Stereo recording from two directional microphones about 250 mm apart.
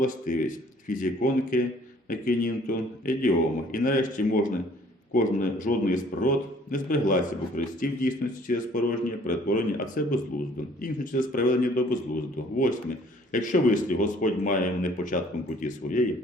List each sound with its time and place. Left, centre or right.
0.0 s a man's voice: left
13.3 s a man's voice: left